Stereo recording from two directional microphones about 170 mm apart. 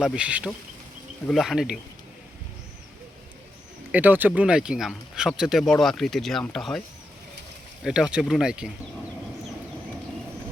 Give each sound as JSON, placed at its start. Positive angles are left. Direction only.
{"t": 0.0, "sound": "speech", "side_deg": -5}
{"t": 3.9, "sound": "speech", "side_deg": -10}
{"t": 7.9, "sound": "speech", "side_deg": -5}